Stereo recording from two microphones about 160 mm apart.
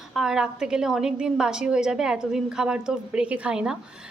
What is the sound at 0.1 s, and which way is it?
A woman's voice, 5° right (ahead or behind).